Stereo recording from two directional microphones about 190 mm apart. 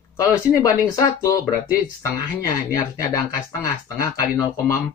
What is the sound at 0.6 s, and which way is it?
Speech, 20° left (ahead or behind).